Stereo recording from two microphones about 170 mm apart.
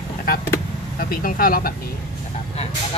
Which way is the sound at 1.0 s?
60° left (ahead or behind).